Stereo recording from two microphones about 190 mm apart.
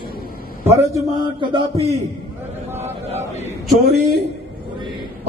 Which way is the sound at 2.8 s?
35° right (ahead or behind).